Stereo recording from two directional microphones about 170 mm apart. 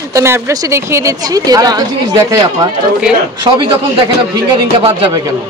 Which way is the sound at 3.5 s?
30° right (ahead or behind).